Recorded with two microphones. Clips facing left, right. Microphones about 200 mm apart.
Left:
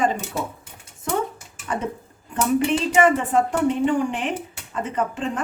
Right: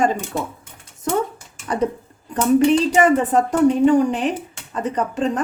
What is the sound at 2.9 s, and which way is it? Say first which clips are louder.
A woman's voice: right 2 dB; 40° right (ahead or behind).